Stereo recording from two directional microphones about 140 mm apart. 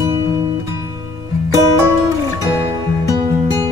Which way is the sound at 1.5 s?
20° right (ahead or behind).